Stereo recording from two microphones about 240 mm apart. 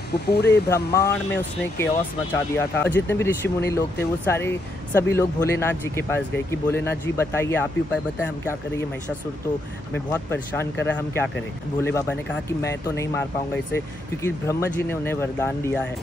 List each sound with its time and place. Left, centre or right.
0.3 s speech: left
0.7 s speech: centre
9.9 s speech: centre
14.2 s speech: centre